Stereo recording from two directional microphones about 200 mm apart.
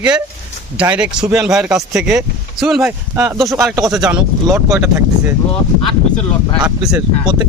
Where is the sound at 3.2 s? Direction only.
15° right (ahead or behind).